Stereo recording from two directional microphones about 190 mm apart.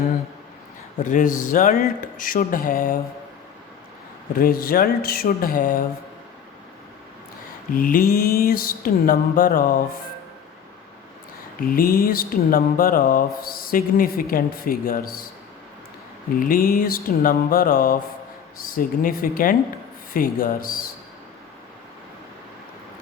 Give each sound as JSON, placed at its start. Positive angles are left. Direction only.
{"t": 1.0, "sound": "mantra", "side_deg": 45}
{"t": 4.4, "sound": "mantra", "side_deg": 50}
{"t": 7.7, "sound": "mantra", "side_deg": 50}
{"t": 11.6, "sound": "mantra", "side_deg": 50}
{"t": 16.3, "sound": "mantra", "side_deg": 50}